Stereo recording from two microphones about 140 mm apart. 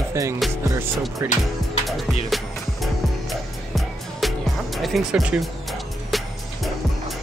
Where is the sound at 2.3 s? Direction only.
Centre (ahead or behind).